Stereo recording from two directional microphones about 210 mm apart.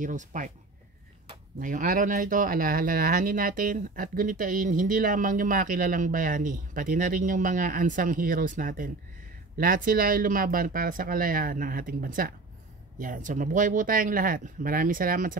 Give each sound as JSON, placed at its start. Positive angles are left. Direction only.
{"t": 0.0, "sound": "speech", "side_deg": -35}
{"t": 1.6, "sound": "speech", "side_deg": -40}